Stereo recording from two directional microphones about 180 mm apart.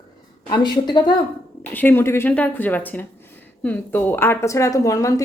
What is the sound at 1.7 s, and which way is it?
A woman's voice, 10° left (ahead or behind).